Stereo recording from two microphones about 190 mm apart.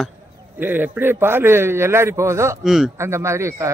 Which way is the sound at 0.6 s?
10° right (ahead or behind).